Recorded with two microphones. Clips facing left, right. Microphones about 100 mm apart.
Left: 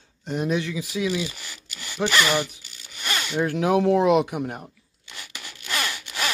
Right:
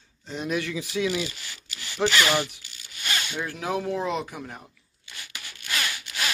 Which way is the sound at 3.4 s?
60° left (ahead or behind).